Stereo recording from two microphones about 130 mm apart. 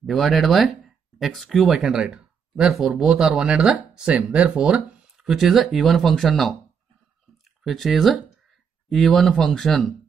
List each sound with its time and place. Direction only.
0.0 s speech: centre (ahead or behind)
7.6 s speech: centre (ahead or behind)